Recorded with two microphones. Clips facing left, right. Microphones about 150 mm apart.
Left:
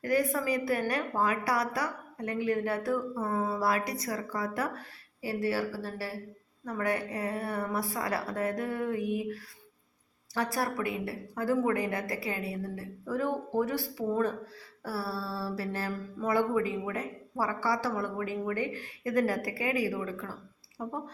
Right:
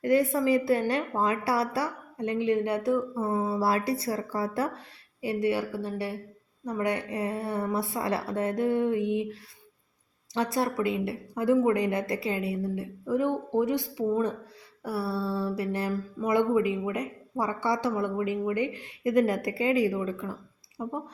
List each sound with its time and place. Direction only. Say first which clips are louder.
0.0 s speech: right 5 dB; 25° right (ahead or behind)